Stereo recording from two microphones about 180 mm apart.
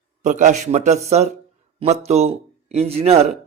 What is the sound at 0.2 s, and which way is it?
Speech, 45° right (ahead or behind).